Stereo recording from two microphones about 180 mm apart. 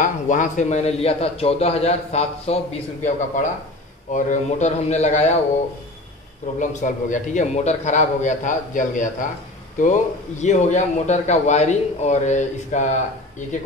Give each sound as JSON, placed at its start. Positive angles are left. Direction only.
{"t": 0.0, "sound": "a man's voice", "side_deg": 45}
{"t": 6.6, "sound": "a man's voice", "side_deg": 45}
{"t": 10.4, "sound": "a man's voice", "side_deg": 40}